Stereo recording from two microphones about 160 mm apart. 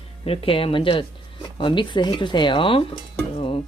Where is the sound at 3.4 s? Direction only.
30° left (ahead or behind).